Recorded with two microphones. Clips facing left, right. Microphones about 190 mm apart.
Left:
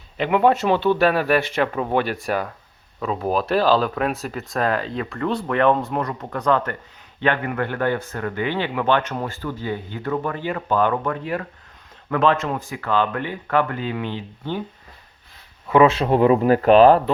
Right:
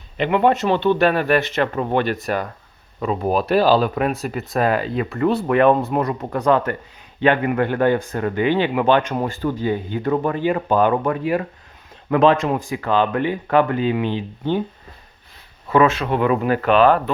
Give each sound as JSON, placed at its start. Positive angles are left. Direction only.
{"t": 0.2, "sound": "speech", "side_deg": 5}
{"t": 3.0, "sound": "a man's voice", "side_deg": 0}
{"t": 15.9, "sound": "speech", "side_deg": 35}